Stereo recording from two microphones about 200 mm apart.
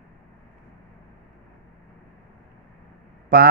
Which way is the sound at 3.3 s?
45° right (ahead or behind).